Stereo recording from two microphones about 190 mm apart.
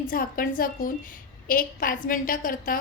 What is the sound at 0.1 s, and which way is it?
A woman's voice, 45° left (ahead or behind).